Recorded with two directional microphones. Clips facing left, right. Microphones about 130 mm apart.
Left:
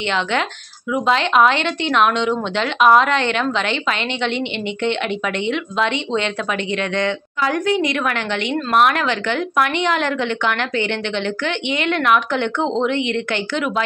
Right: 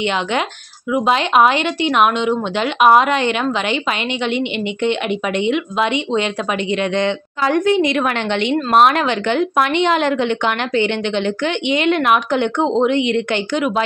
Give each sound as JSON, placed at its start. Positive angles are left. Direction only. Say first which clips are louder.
{"t": 0.9, "sound": "a woman's voice", "louder": "right 2 dB", "side_deg": -15}